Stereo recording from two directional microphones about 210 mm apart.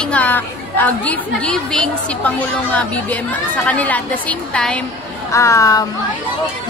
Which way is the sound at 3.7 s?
5° left (ahead or behind).